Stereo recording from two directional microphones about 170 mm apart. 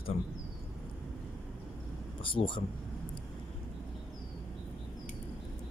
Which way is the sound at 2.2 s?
30° left (ahead or behind).